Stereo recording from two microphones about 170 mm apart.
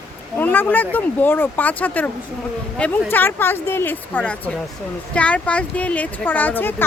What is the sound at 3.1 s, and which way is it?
Speech, 10° left (ahead or behind).